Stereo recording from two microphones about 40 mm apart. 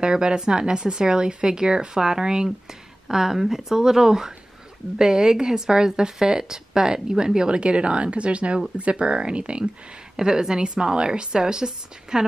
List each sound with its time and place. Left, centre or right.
0.0 s a woman's voice: right
10.1 s a woman's voice: centre